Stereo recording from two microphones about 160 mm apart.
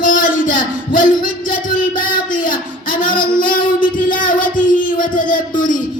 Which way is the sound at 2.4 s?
60° left (ahead or behind).